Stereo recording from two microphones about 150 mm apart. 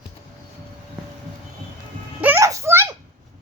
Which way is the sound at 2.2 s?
15° right (ahead or behind).